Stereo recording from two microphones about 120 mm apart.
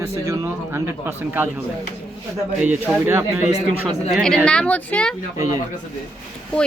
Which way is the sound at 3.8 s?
5° left (ahead or behind).